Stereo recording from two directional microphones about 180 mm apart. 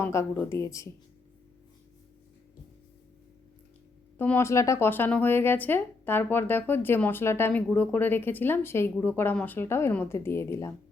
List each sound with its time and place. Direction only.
0.0 s speech: 15° left (ahead or behind)
4.2 s speech: 10° left (ahead or behind)